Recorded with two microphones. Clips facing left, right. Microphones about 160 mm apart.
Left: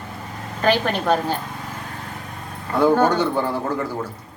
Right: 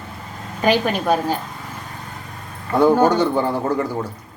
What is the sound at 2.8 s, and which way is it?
Speech, 10° right (ahead or behind).